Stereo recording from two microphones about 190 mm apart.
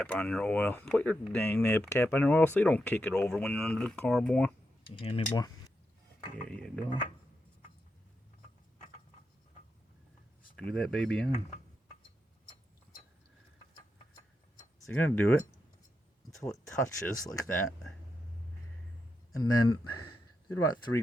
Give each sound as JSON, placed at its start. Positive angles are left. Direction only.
{"t": 0.0, "sound": "speech", "side_deg": 5}
{"t": 4.9, "sound": "speech", "side_deg": 30}
{"t": 6.1, "sound": "speech", "side_deg": 5}
{"t": 10.6, "sound": "speech", "side_deg": 5}
{"t": 14.8, "sound": "speech", "side_deg": 10}
{"t": 19.3, "sound": "speech", "side_deg": 20}